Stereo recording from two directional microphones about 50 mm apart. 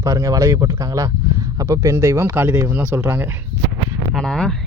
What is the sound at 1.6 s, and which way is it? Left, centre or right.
Speech, right.